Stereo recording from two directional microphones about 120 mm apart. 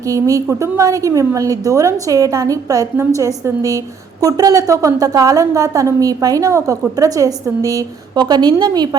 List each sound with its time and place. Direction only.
0.1 s a woman's voice: 30° right (ahead or behind)